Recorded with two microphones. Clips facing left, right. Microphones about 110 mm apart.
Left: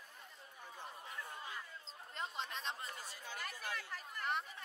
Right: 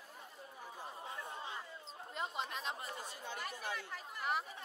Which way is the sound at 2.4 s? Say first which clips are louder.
Right 1 dB; 5° right (ahead or behind).